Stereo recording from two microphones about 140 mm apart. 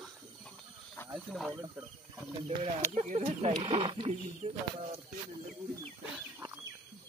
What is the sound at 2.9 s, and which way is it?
Speech, 55° right (ahead or behind).